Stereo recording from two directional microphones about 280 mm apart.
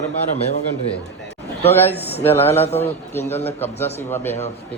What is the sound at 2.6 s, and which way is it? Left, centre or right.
Speech, left.